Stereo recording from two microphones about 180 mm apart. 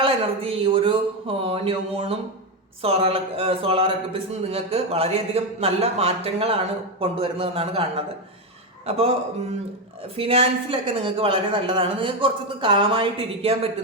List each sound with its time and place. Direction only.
0.0 s speech: 30° right (ahead or behind)
10.2 s a woman's voice: 30° right (ahead or behind)